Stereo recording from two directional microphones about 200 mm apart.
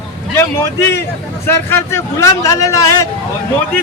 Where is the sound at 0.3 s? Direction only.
10° left (ahead or behind).